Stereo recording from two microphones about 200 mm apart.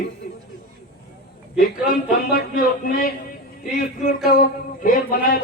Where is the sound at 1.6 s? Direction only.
45° left (ahead or behind).